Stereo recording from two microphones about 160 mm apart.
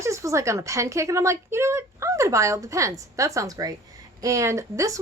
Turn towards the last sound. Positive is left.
turn(degrees=-20)  # may be behind; listen again after turning